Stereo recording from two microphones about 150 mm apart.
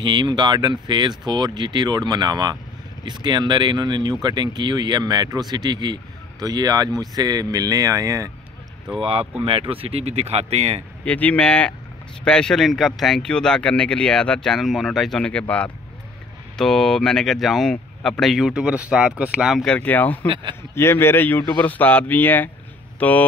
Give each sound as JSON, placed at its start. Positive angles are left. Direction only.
{"t": 0.0, "sound": "speech", "side_deg": -30}
{"t": 8.9, "sound": "speech", "side_deg": -35}
{"t": 11.1, "sound": "speech", "side_deg": 10}